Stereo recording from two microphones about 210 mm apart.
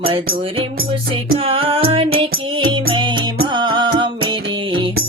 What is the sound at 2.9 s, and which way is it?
Music, 20° right (ahead or behind).